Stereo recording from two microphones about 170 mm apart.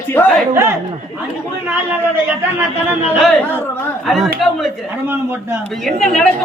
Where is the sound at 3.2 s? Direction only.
5° left (ahead or behind).